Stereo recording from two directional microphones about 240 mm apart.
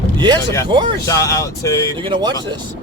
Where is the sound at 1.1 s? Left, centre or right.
Centre.